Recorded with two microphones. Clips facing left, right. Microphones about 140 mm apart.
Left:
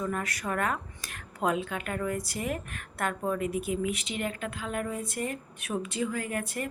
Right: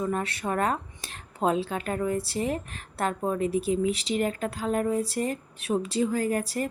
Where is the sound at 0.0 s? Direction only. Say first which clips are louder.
Right 4 dB; 30° right (ahead or behind).